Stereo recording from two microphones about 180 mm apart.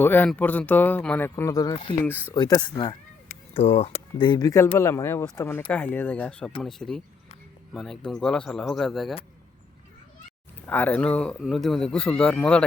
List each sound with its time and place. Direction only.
0.0 s a man's voice: 10° left (ahead or behind)
10.7 s a man's voice: 10° left (ahead or behind)